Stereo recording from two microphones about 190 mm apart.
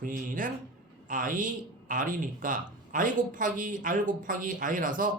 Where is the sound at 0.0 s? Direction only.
45° right (ahead or behind).